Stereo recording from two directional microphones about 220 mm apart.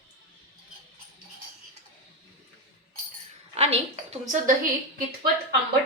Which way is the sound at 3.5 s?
30° right (ahead or behind).